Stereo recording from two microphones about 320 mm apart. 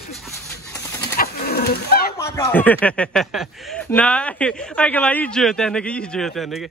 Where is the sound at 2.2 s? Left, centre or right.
Centre.